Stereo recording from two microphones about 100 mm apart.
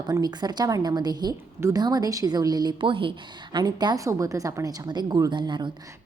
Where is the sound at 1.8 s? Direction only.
40° right (ahead or behind); by 3.1 s 60° right (ahead or behind).